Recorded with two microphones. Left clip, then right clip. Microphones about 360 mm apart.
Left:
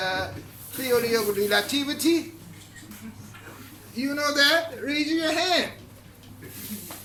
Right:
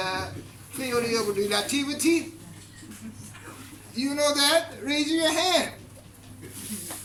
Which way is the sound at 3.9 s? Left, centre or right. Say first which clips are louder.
Even; centre.